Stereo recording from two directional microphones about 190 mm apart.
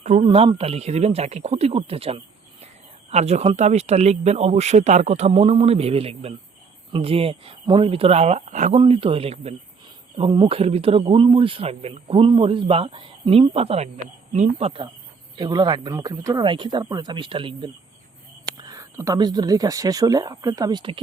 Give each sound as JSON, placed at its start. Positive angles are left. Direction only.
{"t": 0.0, "sound": "speech", "side_deg": -35}